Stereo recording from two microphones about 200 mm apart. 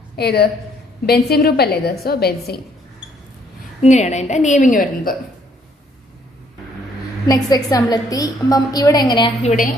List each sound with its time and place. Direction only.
0.2 s a woman's voice: 55° left (ahead or behind)
3.8 s a woman's voice: 35° left (ahead or behind)
7.3 s a woman's voice: 15° left (ahead or behind); by 9.6 s 35° left (ahead or behind)